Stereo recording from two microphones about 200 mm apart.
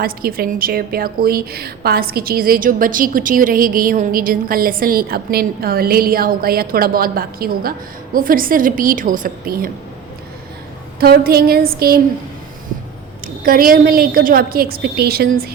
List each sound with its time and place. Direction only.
0.0 s a woman's voice: 50° right (ahead or behind)
11.0 s a woman's voice: 50° right (ahead or behind)
13.2 s a woman's voice: 45° right (ahead or behind)